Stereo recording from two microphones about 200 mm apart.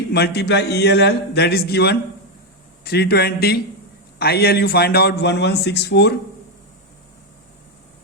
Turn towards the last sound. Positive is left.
turn(degrees=55)  # may be behind; listen again after turning